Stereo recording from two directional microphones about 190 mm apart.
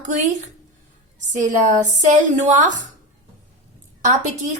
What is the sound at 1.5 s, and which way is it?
Speech, 40° right (ahead or behind).